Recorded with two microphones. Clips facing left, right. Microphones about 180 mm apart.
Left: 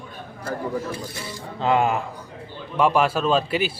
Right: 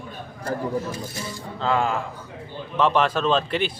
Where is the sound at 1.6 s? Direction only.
20° left (ahead or behind).